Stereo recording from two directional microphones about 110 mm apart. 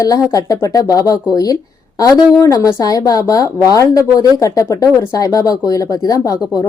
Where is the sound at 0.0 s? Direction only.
30° left (ahead or behind).